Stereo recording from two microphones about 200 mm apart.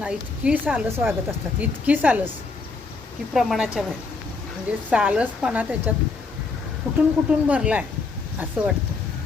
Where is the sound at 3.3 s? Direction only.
Centre (ahead or behind).